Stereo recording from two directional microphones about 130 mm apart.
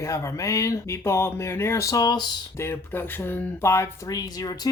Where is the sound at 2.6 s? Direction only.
20° left (ahead or behind).